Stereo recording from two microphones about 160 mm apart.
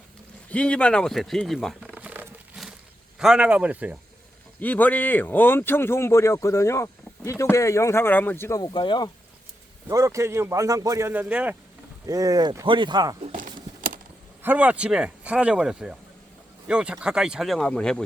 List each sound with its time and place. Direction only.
0.5 s a sound: 5° left (ahead or behind)
3.2 s speech: 5° right (ahead or behind)
4.6 s speech: 10° left (ahead or behind); by 9.0 s 30° left (ahead or behind)
9.9 s speech: 20° right (ahead or behind)
12.0 s speech: 20° right (ahead or behind)
13.3 s a sound: 55° right (ahead or behind)
14.4 s speech: 10° right (ahead or behind)